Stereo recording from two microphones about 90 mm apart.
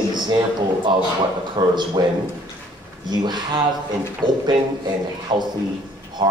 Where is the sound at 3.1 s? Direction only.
55° right (ahead or behind).